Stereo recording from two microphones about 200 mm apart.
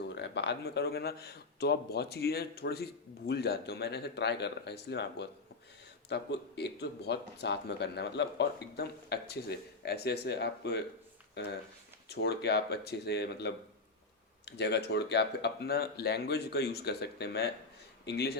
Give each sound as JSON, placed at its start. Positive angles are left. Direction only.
{"t": 0.1, "sound": "speech", "side_deg": 60}
{"t": 12.0, "sound": "speech", "side_deg": 55}